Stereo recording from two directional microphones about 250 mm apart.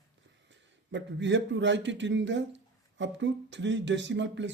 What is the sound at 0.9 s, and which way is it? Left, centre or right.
Speech, right.